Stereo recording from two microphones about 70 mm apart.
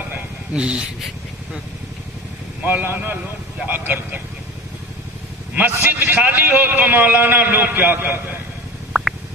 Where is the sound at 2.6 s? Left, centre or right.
Right.